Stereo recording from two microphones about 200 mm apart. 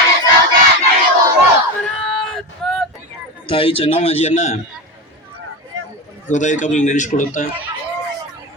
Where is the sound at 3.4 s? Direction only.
25° left (ahead or behind).